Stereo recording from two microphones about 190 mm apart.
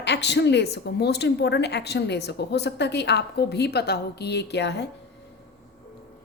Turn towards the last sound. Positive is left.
turn(degrees=65)  # may be behind; listen again after turning